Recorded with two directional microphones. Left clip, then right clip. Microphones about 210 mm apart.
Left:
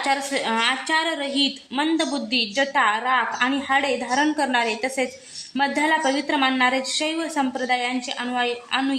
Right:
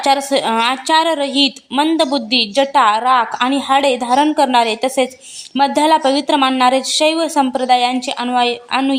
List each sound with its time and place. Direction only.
0.0 s a woman's voice: 40° right (ahead or behind)